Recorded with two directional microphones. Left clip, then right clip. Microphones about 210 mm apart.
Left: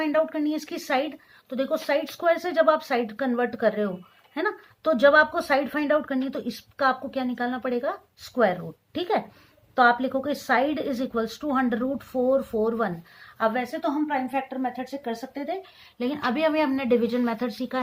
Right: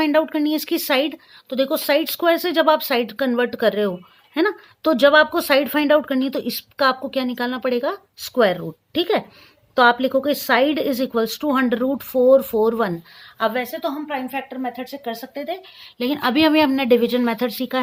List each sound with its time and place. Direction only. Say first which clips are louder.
0.0 s a woman's voice: right 6 dB; 50° right (ahead or behind)